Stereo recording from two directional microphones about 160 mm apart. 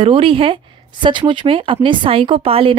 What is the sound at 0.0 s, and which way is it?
A woman's voice, 35° right (ahead or behind).